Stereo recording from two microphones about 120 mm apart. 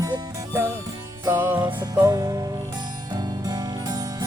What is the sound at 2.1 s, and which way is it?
Music, 30° right (ahead or behind).